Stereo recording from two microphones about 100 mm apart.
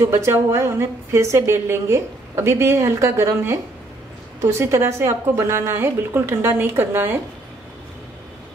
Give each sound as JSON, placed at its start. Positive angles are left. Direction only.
{"t": 0.0, "sound": "a woman's voice", "side_deg": -25}